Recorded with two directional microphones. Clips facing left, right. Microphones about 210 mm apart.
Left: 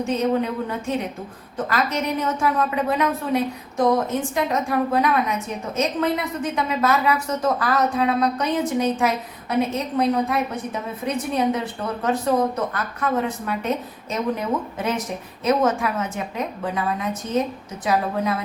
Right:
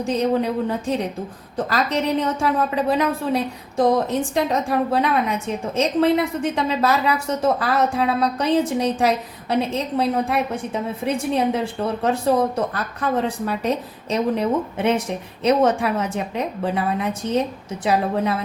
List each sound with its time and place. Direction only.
0.0 s a woman's voice: 35° right (ahead or behind)